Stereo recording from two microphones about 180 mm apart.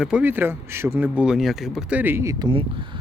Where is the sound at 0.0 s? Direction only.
5° right (ahead or behind).